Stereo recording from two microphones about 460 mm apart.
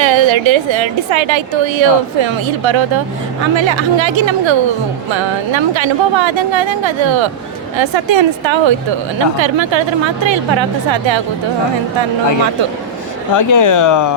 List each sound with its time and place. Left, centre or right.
0.0 s a woman's voice: right
13.3 s speech: left